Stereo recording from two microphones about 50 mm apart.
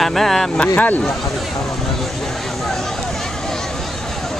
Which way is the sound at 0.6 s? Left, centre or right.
Left.